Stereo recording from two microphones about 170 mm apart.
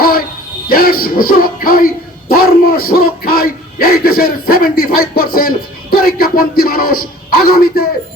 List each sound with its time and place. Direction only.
0.7 s a man's voice: 60° left (ahead or behind)